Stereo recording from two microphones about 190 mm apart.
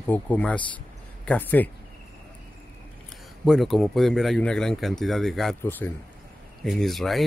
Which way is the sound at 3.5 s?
Centre (ahead or behind).